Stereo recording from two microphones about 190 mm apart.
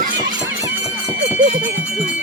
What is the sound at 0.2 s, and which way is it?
Music, 20° right (ahead or behind).